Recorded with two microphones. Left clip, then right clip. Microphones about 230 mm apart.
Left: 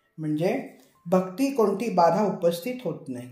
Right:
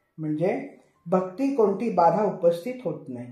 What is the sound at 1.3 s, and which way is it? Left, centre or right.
Speech, left.